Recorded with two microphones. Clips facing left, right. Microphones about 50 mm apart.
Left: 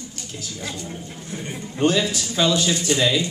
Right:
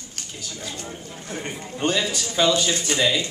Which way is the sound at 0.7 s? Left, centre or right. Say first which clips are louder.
Left 2 dB; right.